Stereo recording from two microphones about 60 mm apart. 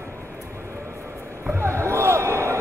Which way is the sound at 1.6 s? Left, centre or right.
Right.